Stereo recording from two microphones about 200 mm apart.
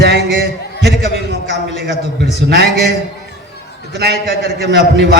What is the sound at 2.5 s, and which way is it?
Speech, 55° right (ahead or behind).